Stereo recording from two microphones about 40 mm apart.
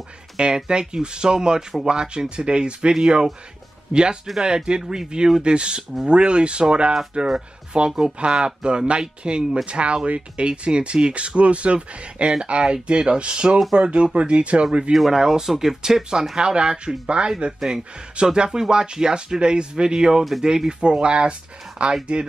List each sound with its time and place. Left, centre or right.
0.4 s speech: centre
14.9 s speech: centre
16.5 s speech: right
17.6 s speech: centre
18.2 s speech: centre